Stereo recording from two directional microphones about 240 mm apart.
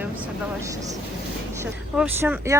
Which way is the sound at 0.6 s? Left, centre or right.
Centre.